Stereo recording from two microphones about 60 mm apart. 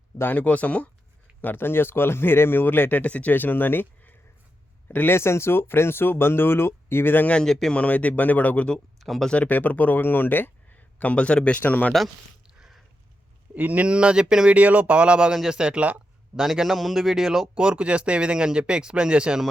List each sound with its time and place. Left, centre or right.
0.3 s speech: left
7.3 s a man's voice: centre
8.7 s speech: centre
9.3 s speech: left
13.6 s speech: right
16.3 s speech: centre
17.5 s speech: centre